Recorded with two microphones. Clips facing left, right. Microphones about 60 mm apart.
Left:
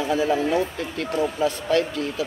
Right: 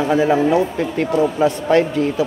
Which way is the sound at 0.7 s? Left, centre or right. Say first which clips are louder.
Right 8 dB; right.